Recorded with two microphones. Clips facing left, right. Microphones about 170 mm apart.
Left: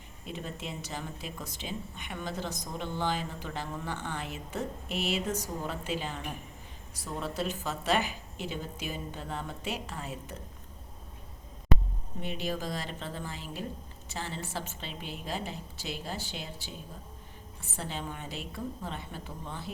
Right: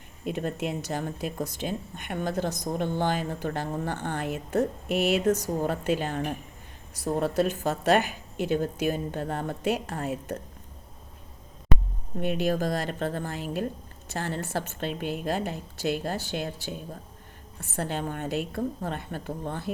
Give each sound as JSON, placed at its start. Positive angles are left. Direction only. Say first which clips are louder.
{"t": 0.3, "sound": "a woman's voice", "louder": "right 9 dB", "side_deg": -60}
{"t": 12.2, "sound": "a woman's voice", "louder": "right 9 dB", "side_deg": -55}